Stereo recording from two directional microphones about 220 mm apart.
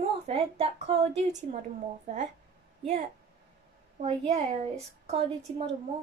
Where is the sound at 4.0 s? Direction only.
30° right (ahead or behind).